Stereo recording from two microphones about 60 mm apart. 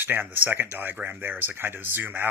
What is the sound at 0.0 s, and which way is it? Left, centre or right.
Speech, right.